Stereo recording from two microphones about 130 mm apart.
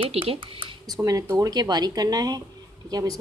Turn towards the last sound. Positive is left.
turn(degrees=-30)  # may be behind; listen again after turning